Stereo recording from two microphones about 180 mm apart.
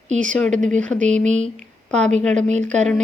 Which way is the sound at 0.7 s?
5° left (ahead or behind).